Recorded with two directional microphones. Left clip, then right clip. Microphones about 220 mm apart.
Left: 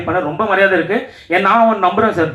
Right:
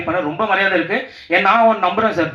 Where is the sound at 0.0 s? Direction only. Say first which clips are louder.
Left 2 dB; 45° right (ahead or behind).